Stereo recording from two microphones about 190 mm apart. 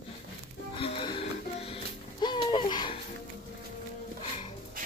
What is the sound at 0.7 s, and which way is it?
Music, 30° left (ahead or behind).